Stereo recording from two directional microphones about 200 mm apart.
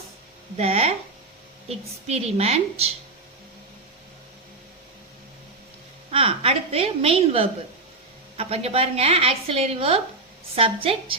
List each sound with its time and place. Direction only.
0.5 s a woman's voice: 30° right (ahead or behind)
6.1 s a woman's voice: 30° right (ahead or behind)